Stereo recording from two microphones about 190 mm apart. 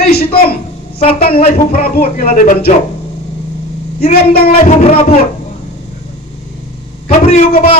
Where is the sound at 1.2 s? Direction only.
50° left (ahead or behind).